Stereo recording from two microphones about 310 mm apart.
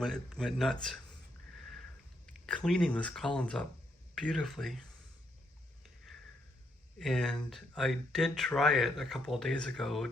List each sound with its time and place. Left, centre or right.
0.0 s speech: centre
2.2 s speech: centre
7.0 s speech: centre